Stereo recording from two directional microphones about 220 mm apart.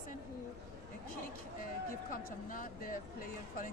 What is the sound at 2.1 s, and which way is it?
Speech, 40° left (ahead or behind).